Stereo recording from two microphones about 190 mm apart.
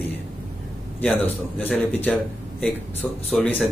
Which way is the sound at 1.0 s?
10° left (ahead or behind).